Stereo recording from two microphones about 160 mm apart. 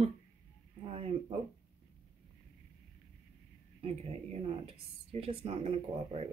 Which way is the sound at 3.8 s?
40° right (ahead or behind).